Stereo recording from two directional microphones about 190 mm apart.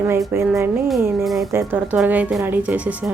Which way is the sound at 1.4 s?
10° right (ahead or behind).